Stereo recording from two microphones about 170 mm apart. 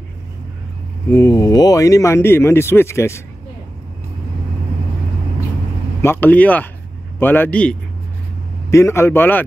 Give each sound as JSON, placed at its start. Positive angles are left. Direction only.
{"t": 1.1, "sound": "speech", "side_deg": 20}
{"t": 6.0, "sound": "speech", "side_deg": 10}